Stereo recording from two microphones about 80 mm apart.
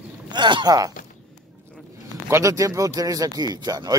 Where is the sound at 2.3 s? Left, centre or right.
Right.